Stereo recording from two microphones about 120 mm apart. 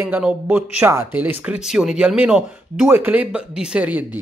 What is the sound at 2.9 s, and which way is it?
Speech, 15° right (ahead or behind).